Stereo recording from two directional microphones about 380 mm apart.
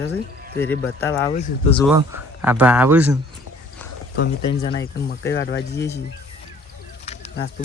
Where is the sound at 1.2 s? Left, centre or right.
Centre.